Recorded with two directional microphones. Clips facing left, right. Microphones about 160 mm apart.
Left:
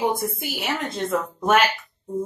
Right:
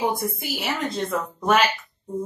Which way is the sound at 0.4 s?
Centre (ahead or behind).